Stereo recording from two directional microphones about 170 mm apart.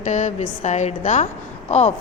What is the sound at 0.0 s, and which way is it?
A woman's voice, 45° left (ahead or behind).